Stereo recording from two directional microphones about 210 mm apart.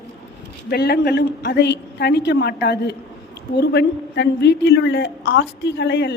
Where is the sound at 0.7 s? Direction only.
50° left (ahead or behind).